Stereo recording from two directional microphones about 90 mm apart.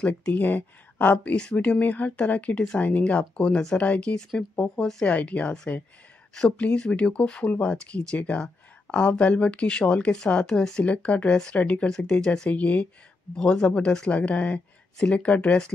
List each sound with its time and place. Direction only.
0.0 s speech: 15° left (ahead or behind)